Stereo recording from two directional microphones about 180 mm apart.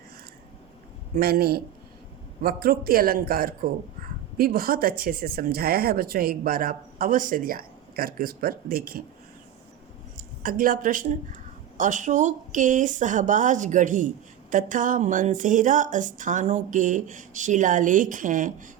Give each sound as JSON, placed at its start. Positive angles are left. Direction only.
{"t": 1.1, "sound": "a man's voice", "side_deg": -60}
{"t": 10.2, "sound": "speech", "side_deg": -50}